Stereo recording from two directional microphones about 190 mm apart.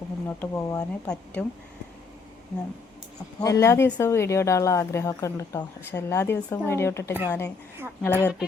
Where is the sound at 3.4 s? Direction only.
15° left (ahead or behind).